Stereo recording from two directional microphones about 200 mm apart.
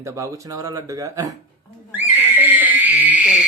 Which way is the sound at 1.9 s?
10° right (ahead or behind).